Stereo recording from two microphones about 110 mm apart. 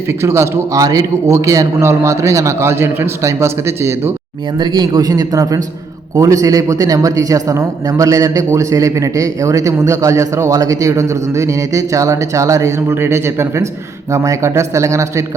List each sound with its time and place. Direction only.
0.2 s a man's voice: 25° right (ahead or behind)
4.6 s a man's voice: 40° right (ahead or behind)